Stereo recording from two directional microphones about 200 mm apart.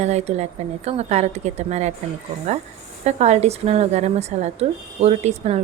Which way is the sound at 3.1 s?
35° right (ahead or behind).